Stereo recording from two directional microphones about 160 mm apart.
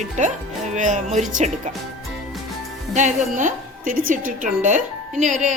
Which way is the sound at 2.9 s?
50° right (ahead or behind).